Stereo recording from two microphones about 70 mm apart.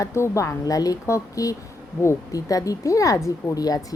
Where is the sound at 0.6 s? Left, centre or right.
Left.